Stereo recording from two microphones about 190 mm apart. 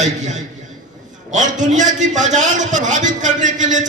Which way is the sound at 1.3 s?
40° right (ahead or behind).